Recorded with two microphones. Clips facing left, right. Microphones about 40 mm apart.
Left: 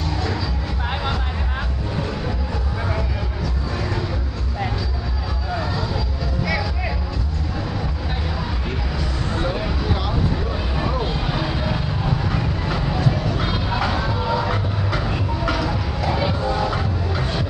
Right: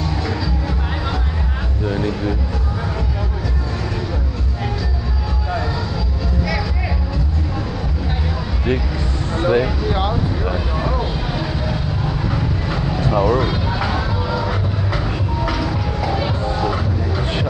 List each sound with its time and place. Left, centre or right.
9.4 s vehicle: right
10.8 s a sound: centre
12.4 s music: centre
13.1 s vehicle: right
13.4 s music: centre
16.6 s vehicle: centre